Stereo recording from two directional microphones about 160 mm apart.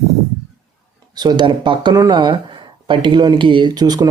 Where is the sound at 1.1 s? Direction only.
25° right (ahead or behind).